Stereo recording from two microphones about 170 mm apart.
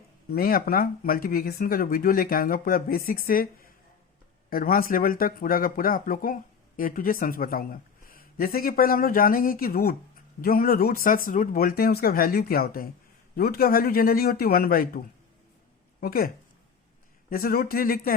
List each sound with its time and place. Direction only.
0.3 s speech: 60° left (ahead or behind)